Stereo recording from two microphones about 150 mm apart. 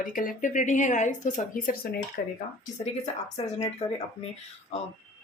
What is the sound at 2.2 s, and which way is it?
Speech, 80° left.